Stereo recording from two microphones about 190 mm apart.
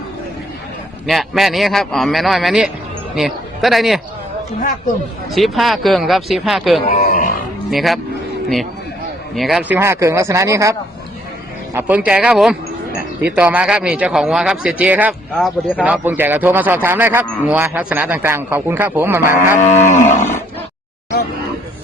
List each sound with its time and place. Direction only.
1.0 s a man's voice: centre (ahead or behind)
5.3 s speech: centre (ahead or behind)
6.9 s a sound: 40° left (ahead or behind)
7.7 s speech: centre (ahead or behind)
9.3 s a man's voice: centre (ahead or behind)
19.5 s cattle: 40° left (ahead or behind)